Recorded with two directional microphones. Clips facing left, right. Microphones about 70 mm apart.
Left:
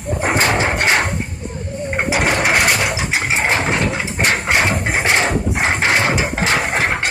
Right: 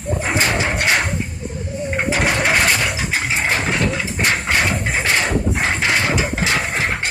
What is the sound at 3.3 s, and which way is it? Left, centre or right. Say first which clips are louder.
Engine: left 3 dB; left.